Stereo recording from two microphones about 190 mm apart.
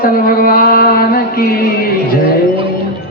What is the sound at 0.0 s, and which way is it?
Mantra, 50° left (ahead or behind).